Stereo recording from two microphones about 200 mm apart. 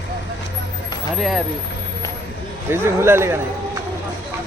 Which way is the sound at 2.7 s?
10° right (ahead or behind).